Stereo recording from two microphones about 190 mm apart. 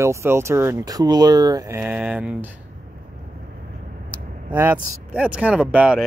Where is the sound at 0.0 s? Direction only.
15° right (ahead or behind).